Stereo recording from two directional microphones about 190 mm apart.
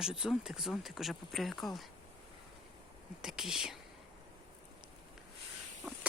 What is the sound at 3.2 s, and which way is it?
Speech, 5° right (ahead or behind).